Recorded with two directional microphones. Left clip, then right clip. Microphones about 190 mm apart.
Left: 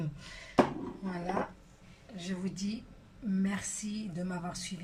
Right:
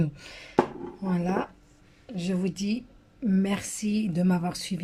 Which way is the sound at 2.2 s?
55° right (ahead or behind).